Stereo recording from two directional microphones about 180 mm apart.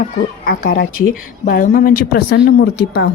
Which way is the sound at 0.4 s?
55° left (ahead or behind).